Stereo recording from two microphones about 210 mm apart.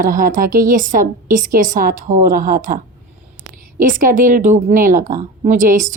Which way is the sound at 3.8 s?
40° right (ahead or behind).